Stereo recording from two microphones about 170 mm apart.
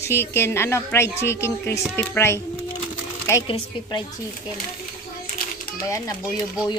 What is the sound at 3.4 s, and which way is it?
Speech, 30° left (ahead or behind).